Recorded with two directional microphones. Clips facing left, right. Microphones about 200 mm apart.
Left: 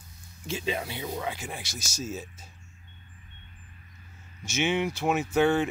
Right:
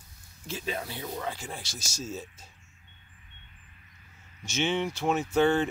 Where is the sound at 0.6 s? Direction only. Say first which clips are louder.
Left 3 dB; 15° left (ahead or behind).